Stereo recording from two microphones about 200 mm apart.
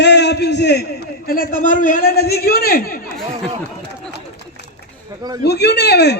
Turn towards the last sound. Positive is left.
turn(degrees=55)  # may be behind; listen again after turning